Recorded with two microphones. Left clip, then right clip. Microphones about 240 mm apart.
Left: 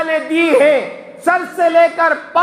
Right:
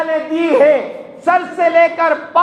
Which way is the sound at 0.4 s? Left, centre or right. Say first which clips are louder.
Right 1 dB; left.